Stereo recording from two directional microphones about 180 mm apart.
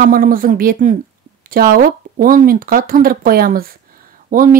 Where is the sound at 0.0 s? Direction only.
50° right (ahead or behind).